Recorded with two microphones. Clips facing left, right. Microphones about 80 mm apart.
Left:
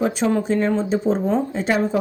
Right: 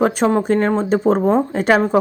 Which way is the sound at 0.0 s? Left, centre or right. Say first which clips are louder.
Right 4 dB; right.